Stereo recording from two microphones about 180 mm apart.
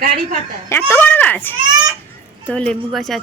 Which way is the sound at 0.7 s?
10° left (ahead or behind).